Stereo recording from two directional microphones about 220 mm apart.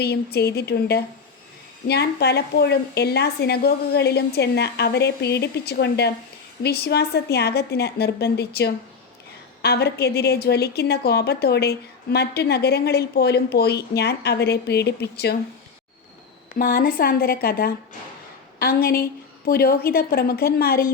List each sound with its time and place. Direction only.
0.0 s a woman's voice: 45° left (ahead or behind)
16.6 s a woman's voice: 40° left (ahead or behind)